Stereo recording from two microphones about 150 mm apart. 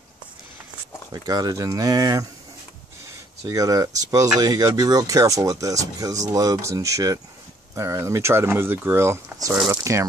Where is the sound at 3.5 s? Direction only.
25° right (ahead or behind).